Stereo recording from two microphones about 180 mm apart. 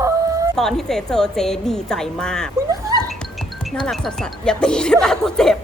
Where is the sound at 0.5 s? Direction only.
Centre (ahead or behind).